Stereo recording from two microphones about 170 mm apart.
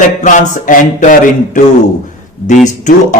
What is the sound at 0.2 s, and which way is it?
Speech, 50° left (ahead or behind).